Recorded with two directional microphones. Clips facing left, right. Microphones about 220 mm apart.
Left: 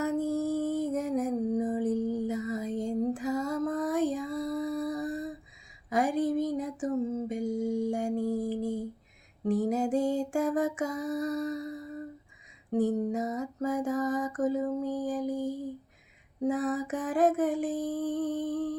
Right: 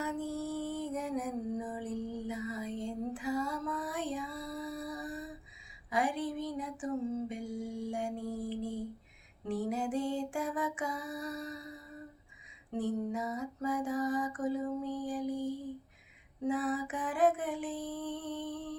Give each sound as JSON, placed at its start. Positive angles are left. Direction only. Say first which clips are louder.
{"t": 0.0, "sound": "music", "louder": "left 8 dB", "side_deg": 45}
{"t": 5.9, "sound": "a sound", "louder": "left 6 dB", "side_deg": 45}
{"t": 9.4, "sound": "lullaby", "louder": "left 7 dB", "side_deg": 45}
{"t": 12.7, "sound": "music", "louder": "left 7 dB", "side_deg": 45}
{"t": 16.4, "sound": "mantra", "louder": "left 4 dB", "side_deg": 45}